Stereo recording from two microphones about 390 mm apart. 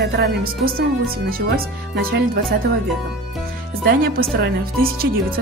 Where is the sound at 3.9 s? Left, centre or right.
Right.